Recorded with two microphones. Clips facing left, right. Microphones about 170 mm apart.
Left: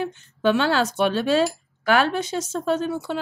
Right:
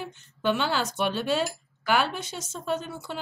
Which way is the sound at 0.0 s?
90° left.